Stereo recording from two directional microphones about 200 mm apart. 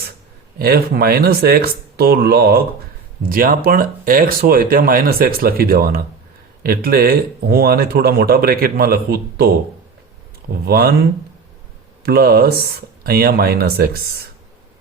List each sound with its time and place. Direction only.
0.6 s speech: 50° right (ahead or behind)
10.5 s speech: 50° right (ahead or behind)
12.0 s speech: 50° right (ahead or behind)